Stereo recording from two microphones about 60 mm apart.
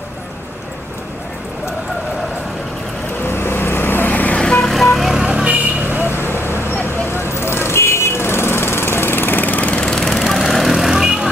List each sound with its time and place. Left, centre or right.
3.3 s vehicle: left
4.4 s vehicle: centre
4.6 s vehicle: centre
5.2 s vehicle: centre
5.9 s vehicle: right
6.6 s vehicle: left; by 10.0 s centre
10.0 s vehicle: centre